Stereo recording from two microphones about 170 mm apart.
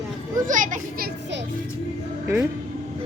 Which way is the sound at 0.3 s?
50° right (ahead or behind).